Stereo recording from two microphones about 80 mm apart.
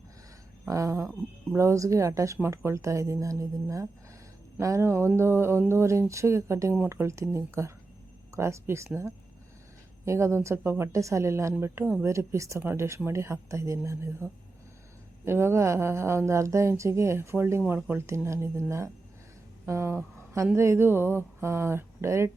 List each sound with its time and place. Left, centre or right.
0.6 s a sound: right
1.5 s speech: right
10.1 s speech: right